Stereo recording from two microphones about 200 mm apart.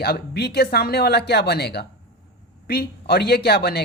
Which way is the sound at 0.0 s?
55° left (ahead or behind).